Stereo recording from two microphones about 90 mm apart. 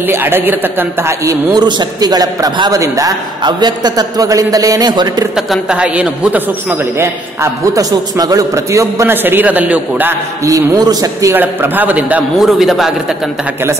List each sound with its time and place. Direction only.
0.1 s speech: 25° right (ahead or behind)
1.2 s a man's voice: 50° right (ahead or behind)
5.7 s speech: 15° right (ahead or behind)
7.7 s a man's voice: 40° right (ahead or behind)
9.1 s speech: 25° right (ahead or behind)
10.4 s a man's voice: 45° right (ahead or behind)
11.3 s speech: 20° right (ahead or behind)
12.4 s a man's voice: centre (ahead or behind)